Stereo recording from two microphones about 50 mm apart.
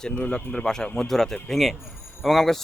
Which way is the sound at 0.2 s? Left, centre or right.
Left.